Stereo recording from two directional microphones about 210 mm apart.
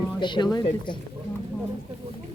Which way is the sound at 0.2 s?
20° left (ahead or behind).